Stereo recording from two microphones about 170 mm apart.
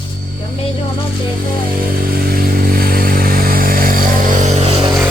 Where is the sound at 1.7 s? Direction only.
60° right (ahead or behind); by 4.9 s 40° right (ahead or behind).